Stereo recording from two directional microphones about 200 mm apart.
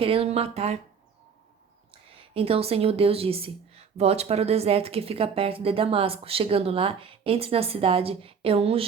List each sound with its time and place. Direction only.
0.0 s a woman's voice: 30° right (ahead or behind)
1.9 s a woman's voice: 25° right (ahead or behind)